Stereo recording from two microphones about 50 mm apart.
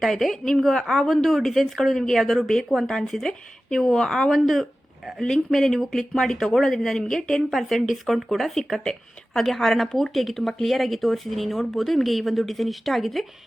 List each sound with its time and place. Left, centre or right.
0.0 s speech: centre